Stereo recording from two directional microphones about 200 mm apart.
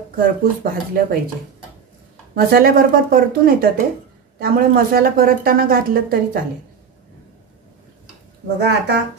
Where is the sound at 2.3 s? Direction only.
50° right (ahead or behind).